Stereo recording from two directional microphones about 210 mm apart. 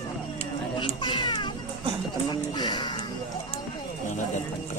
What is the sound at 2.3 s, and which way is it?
Speech, 20° left (ahead or behind).